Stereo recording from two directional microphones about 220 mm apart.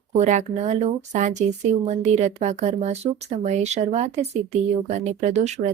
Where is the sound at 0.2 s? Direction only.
35° right (ahead or behind).